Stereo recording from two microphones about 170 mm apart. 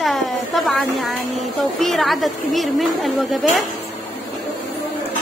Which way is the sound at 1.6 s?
Centre (ahead or behind).